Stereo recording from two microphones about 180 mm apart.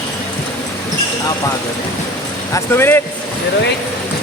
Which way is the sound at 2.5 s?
15° left (ahead or behind).